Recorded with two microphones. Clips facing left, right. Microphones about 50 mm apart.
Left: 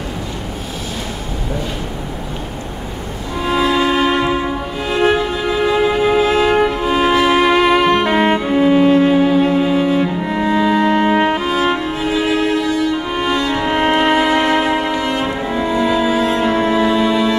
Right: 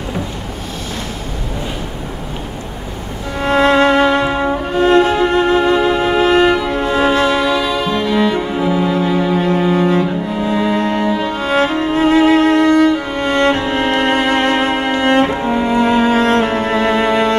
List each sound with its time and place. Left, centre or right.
3.4 s music: right
7.1 s music: left
9.3 s cello: right
10.2 s music: left
11.4 s music: right
13.7 s music: left
14.1 s music: right
15.4 s cello: right